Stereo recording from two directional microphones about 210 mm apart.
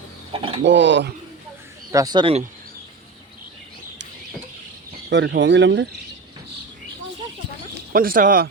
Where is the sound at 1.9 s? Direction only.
20° right (ahead or behind).